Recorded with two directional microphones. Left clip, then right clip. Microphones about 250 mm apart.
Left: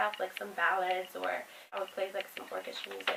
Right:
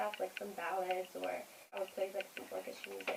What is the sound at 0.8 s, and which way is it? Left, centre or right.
A woman's voice, left.